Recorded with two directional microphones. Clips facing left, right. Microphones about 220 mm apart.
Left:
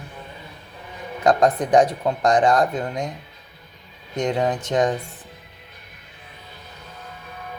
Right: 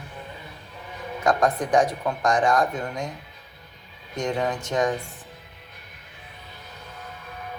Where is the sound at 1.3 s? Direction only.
20° left (ahead or behind).